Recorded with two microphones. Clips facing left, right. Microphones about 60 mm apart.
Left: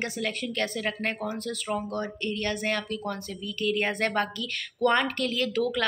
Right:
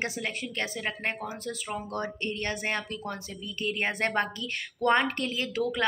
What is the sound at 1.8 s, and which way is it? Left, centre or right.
A woman's voice, right.